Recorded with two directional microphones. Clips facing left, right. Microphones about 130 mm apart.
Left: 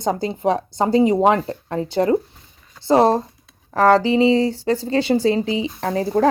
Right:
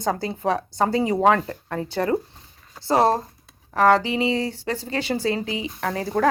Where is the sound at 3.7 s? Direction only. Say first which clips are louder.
Left 3 dB; 30° left (ahead or behind).